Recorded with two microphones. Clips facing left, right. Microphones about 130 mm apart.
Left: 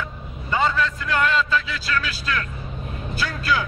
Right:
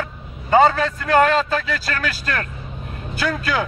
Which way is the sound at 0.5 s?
45° right (ahead or behind).